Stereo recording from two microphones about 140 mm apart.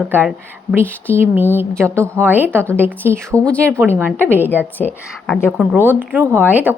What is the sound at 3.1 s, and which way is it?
Speech, 10° left (ahead or behind).